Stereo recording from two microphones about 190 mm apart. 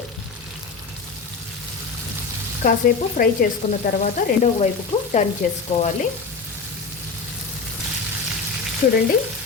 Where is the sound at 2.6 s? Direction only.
45° left (ahead or behind).